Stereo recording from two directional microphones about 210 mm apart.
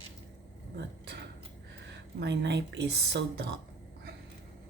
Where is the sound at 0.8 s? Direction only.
55° right (ahead or behind).